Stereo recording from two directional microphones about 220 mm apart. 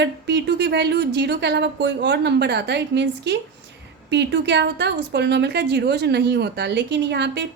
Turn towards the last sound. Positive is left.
turn(degrees=-50)  # may be behind; listen again after turning